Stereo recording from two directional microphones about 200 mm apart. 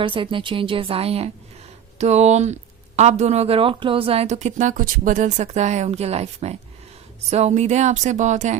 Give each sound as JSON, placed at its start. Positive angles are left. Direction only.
{"t": 0.0, "sound": "speech", "side_deg": -25}